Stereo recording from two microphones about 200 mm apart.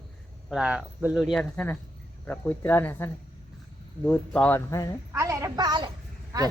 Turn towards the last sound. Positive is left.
turn(degrees=-15)  # may be behind; listen again after turning